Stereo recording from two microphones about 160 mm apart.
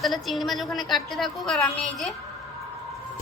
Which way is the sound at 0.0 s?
Centre (ahead or behind).